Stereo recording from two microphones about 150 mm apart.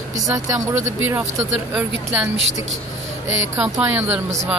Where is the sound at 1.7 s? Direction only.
10° right (ahead or behind).